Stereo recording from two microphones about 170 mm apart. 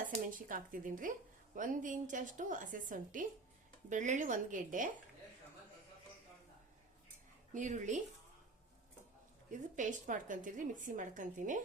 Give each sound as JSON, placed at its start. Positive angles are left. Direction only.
{"t": 0.3, "sound": "a woman's voice", "side_deg": -55}
{"t": 7.5, "sound": "a woman's voice", "side_deg": -45}
{"t": 9.5, "sound": "a woman's voice", "side_deg": -45}